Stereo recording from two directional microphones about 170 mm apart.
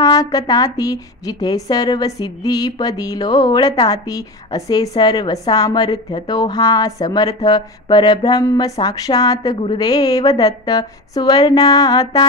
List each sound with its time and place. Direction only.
0.0 s a woman's voice: 20° left (ahead or behind)